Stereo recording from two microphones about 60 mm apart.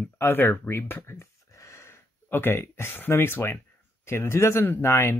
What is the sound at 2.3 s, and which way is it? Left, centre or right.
Speech, left.